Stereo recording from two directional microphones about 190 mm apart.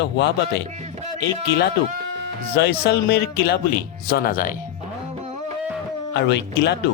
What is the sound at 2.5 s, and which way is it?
Speech, 60° left (ahead or behind).